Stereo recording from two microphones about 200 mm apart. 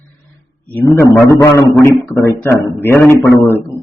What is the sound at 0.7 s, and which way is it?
A man's voice, 15° left (ahead or behind).